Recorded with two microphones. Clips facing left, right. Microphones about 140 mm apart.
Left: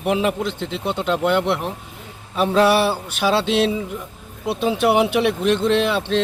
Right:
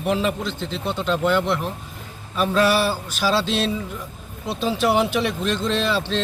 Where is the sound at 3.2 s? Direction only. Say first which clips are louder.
Left 4 dB; 65° left (ahead or behind).